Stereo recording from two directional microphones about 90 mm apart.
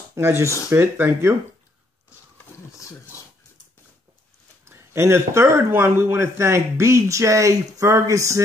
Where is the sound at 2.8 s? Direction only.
35° left (ahead or behind).